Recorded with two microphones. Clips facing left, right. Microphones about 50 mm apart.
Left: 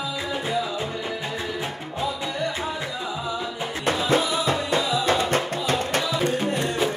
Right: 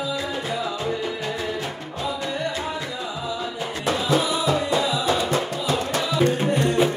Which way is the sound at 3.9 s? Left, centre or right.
Left.